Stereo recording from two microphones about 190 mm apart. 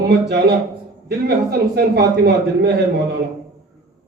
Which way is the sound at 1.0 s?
60° right (ahead or behind).